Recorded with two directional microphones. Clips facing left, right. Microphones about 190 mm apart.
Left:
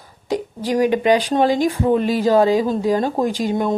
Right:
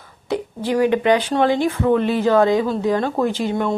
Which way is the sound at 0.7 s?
15° left (ahead or behind).